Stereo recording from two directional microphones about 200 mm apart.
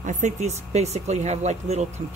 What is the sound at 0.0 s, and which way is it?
Speech, 40° right (ahead or behind).